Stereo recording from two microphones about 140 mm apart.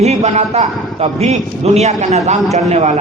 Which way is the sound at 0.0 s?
50° right (ahead or behind).